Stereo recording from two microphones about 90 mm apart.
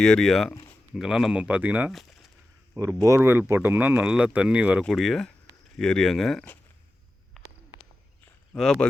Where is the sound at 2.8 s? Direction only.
40° right (ahead or behind).